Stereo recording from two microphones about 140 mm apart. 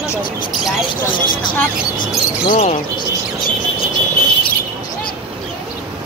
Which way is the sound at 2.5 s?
50° left (ahead or behind).